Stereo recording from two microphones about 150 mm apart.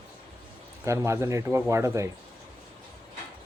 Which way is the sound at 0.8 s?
20° right (ahead or behind).